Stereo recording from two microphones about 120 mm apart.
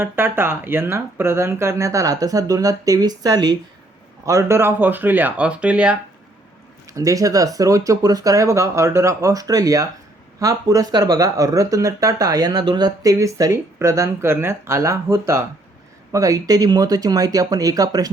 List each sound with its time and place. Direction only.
0.0 s speech: 20° right (ahead or behind)
6.9 s speech: 30° right (ahead or behind)